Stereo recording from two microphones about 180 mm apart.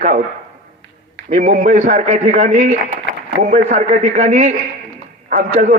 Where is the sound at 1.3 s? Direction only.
40° right (ahead or behind).